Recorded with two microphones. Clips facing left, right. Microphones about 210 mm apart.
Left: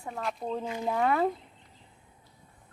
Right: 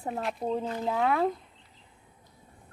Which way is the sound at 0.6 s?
10° left (ahead or behind).